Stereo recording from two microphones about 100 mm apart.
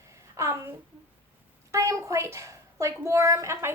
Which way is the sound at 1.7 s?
30° right (ahead or behind).